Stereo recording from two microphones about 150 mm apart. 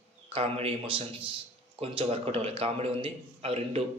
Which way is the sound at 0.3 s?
40° right (ahead or behind).